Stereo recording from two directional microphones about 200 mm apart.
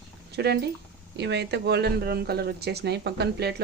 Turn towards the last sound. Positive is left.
turn(degrees=-55)  # may be behind; listen again after turning